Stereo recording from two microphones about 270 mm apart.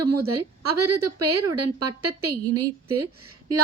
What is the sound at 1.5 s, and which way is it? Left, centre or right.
Speech, right.